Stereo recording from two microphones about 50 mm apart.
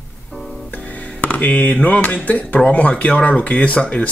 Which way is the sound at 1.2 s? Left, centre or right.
Left.